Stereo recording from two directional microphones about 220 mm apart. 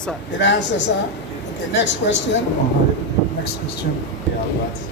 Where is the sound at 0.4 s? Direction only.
55° left (ahead or behind).